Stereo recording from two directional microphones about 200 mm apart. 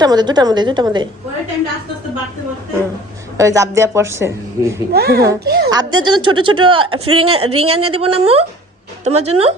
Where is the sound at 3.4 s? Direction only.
15° right (ahead or behind).